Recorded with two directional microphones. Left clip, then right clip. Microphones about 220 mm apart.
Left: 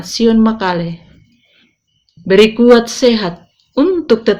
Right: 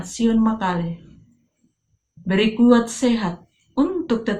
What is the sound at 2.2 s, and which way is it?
Speech, 40° left (ahead or behind).